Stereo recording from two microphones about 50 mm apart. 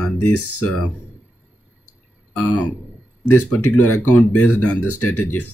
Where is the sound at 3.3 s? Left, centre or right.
Left.